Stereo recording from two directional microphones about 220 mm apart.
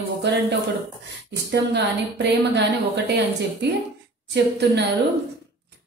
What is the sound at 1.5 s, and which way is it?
A woman's voice, 50° right (ahead or behind).